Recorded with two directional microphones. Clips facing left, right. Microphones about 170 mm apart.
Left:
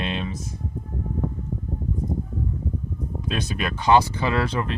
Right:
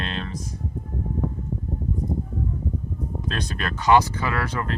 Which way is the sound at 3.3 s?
10° left (ahead or behind).